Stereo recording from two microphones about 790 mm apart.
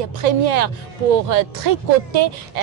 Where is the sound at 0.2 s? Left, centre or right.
Right.